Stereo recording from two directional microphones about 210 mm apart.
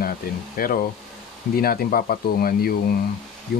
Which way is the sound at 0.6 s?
40° left (ahead or behind).